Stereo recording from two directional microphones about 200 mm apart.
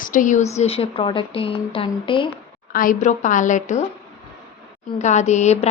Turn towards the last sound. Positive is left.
turn(degrees=35)  # may be behind; listen again after turning